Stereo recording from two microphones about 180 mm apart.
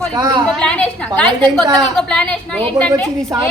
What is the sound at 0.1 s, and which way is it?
Speech, 25° right (ahead or behind).